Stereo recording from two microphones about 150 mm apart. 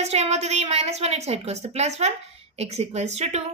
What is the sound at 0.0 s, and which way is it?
A woman's voice, 45° right (ahead or behind).